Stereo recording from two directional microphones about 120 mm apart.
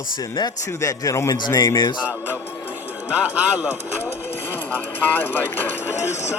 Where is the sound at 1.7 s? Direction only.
40° left (ahead or behind).